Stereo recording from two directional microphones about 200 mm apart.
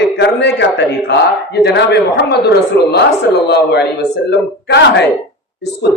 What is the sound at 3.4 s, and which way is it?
A man's voice, 55° left (ahead or behind).